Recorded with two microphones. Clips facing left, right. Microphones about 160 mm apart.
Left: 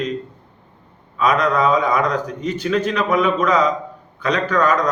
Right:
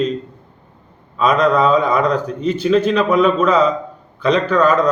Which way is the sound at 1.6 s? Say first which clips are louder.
Right 3 dB; 30° right (ahead or behind).